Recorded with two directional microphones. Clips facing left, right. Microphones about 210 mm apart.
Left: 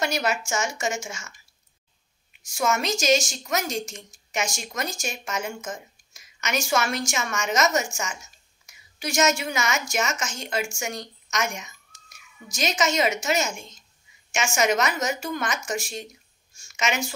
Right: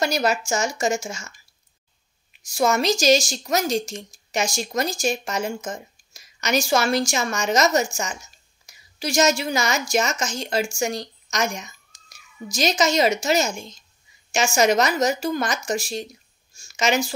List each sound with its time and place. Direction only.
0.0 s a woman's voice: 35° right (ahead or behind)
2.4 s a woman's voice: 35° right (ahead or behind)